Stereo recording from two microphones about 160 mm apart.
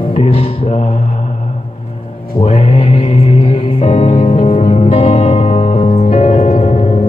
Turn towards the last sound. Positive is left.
turn(degrees=40)  # may be behind; listen again after turning